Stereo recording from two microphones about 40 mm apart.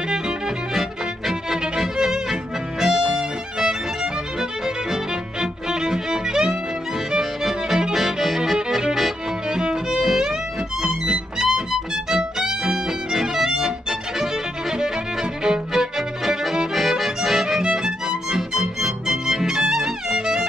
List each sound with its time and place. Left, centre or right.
0.7 s music: centre